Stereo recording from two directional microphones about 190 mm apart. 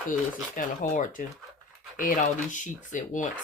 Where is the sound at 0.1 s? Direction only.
45° left (ahead or behind).